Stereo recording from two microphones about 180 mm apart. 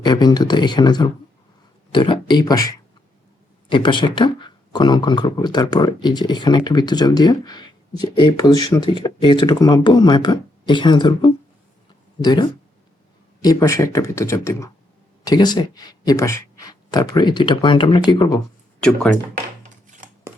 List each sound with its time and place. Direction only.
0.0 s speech: 25° left (ahead or behind)
18.8 s speech: 5° left (ahead or behind)